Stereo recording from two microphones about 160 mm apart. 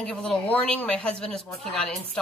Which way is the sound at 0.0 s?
5° left (ahead or behind).